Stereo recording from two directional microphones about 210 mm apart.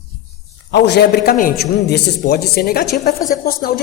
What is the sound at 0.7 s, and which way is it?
A woman's voice, 55° left (ahead or behind).